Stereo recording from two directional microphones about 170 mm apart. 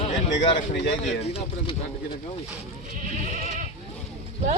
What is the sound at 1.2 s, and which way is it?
Speech, 35° left (ahead or behind).